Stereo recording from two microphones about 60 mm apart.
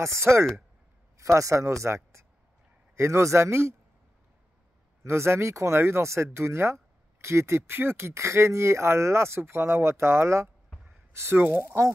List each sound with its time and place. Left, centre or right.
0.0 s speech: right
5.0 s speech: right
11.3 s speech: right